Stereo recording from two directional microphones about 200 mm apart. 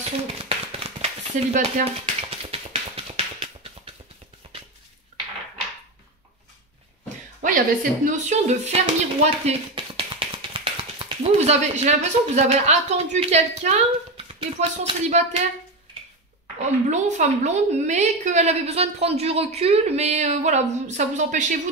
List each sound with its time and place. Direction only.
0.4 s a sound: 30° right (ahead or behind)
2.5 s music: 30° right (ahead or behind)
7.4 s a woman's voice: 40° right (ahead or behind)
16.5 s a woman's voice: 35° right (ahead or behind)